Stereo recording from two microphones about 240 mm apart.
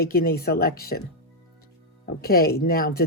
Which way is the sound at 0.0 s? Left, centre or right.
Left.